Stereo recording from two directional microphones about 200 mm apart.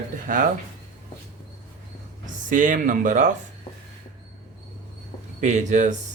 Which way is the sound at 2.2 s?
40° right (ahead or behind).